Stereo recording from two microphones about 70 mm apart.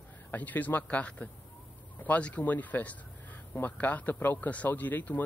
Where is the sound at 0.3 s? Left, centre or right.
Left.